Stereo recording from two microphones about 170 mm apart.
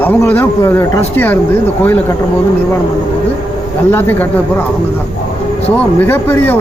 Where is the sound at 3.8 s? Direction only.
10° left (ahead or behind).